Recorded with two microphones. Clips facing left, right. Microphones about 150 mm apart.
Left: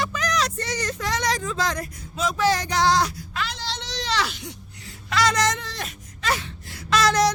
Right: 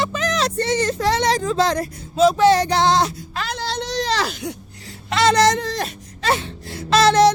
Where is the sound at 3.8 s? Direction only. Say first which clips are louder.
Right 5 dB; 45° right (ahead or behind).